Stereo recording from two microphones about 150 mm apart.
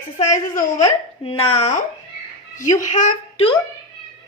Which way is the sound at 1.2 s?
40° left (ahead or behind).